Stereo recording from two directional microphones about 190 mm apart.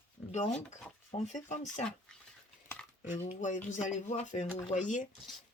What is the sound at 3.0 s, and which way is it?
Speech, 40° left (ahead or behind).